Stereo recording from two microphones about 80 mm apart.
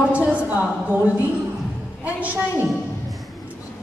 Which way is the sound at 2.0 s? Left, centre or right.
Centre.